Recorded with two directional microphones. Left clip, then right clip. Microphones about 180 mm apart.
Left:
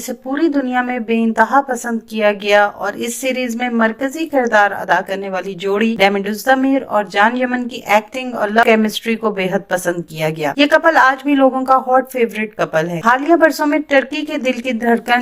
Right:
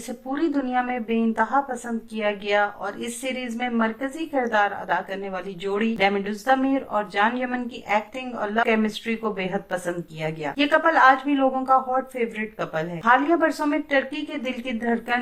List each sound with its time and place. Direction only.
0.3 s speech: 30° left (ahead or behind)